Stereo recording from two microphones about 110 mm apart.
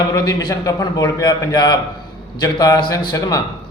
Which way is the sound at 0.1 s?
40° left (ahead or behind).